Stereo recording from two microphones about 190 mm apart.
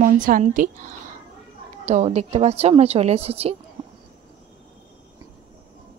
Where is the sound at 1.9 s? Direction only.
35° right (ahead or behind).